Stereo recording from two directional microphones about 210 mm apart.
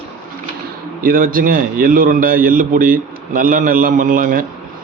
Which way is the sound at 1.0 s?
40° right (ahead or behind).